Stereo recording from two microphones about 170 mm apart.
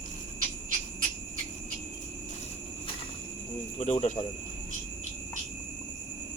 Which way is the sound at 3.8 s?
45° left (ahead or behind).